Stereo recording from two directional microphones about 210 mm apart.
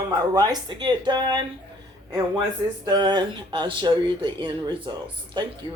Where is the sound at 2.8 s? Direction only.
20° right (ahead or behind).